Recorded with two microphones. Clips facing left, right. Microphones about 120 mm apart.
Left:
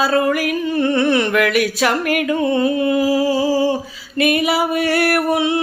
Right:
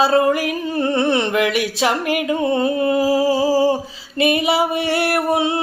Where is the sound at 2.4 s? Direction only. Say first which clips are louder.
Even; 30° right (ahead or behind).